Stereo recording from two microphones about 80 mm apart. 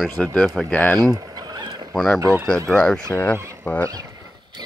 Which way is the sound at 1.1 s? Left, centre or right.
Right.